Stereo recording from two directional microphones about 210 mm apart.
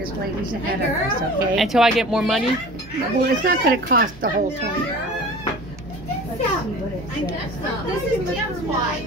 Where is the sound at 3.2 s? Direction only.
45° right (ahead or behind).